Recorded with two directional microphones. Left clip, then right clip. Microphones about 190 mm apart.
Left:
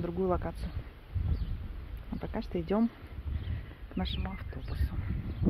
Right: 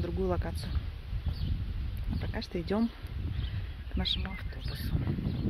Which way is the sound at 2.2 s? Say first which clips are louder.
Left 1 dB; 15° right (ahead or behind).